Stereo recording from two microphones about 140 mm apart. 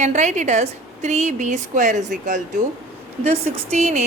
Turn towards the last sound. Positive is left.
turn(degrees=-50)  # may be behind; listen again after turning